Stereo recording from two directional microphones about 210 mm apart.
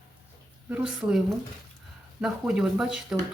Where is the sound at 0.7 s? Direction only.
5° right (ahead or behind).